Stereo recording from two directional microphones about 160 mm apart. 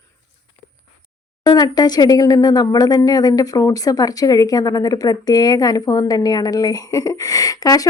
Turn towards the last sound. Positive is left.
turn(degrees=20)  # may be behind; listen again after turning